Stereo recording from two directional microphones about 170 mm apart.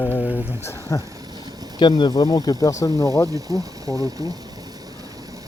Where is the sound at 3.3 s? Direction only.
20° right (ahead or behind).